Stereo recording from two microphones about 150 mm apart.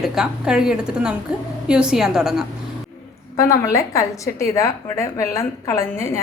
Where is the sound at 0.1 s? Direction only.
5° right (ahead or behind).